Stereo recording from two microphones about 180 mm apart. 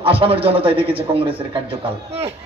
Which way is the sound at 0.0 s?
30° right (ahead or behind).